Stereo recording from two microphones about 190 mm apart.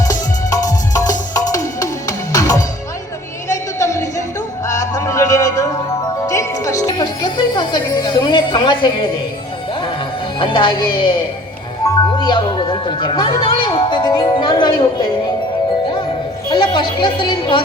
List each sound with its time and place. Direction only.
0.0 s music: 20° left (ahead or behind)
3.5 s a sound: 15° left (ahead or behind)
4.6 s music: 15° left (ahead or behind)
10.4 s speech: 25° left (ahead or behind)
12.1 s music: 25° left (ahead or behind)
16.5 s speech: 25° left (ahead or behind)